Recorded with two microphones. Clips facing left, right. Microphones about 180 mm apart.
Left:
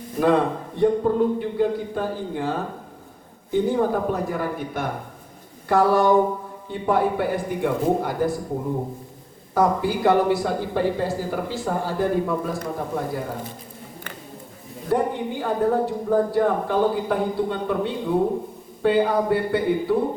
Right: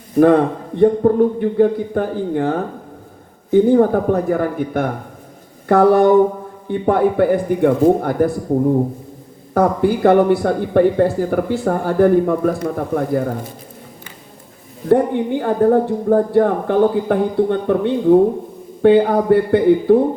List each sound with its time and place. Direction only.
0.8 s speech: 55° right (ahead or behind)
9.6 s speech: 55° right (ahead or behind)
14.8 s speech: 55° right (ahead or behind)